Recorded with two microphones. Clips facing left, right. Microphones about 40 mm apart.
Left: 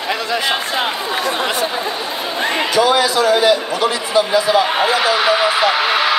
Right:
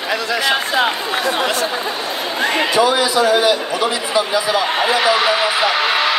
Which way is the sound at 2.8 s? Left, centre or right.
Left.